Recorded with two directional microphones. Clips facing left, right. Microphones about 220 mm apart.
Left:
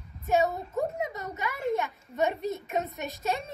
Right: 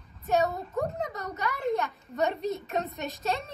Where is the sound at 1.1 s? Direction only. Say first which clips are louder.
Right 1 dB; 20° left (ahead or behind).